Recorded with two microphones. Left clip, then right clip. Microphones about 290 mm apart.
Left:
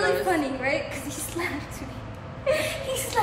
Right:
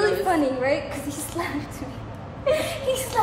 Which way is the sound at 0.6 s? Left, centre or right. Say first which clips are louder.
Right 3 dB; centre.